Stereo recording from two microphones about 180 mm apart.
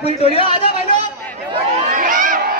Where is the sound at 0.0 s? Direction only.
35° left (ahead or behind).